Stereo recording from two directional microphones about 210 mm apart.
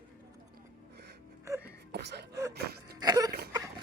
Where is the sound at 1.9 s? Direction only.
50° right (ahead or behind).